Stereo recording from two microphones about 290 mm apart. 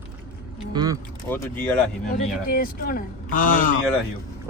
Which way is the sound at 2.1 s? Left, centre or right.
Left.